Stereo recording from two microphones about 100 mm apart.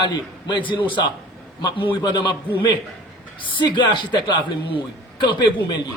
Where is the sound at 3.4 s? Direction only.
55° left (ahead or behind).